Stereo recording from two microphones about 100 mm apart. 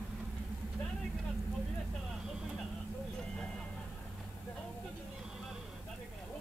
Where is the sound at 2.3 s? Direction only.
5° right (ahead or behind).